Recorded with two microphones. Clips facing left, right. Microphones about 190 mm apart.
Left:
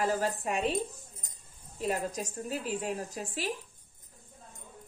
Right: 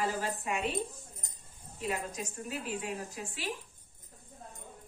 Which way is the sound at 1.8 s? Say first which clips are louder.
Left 4 dB; 40° left (ahead or behind).